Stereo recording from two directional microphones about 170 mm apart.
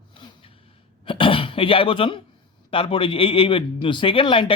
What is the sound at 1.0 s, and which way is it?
Speech, 30° left (ahead or behind).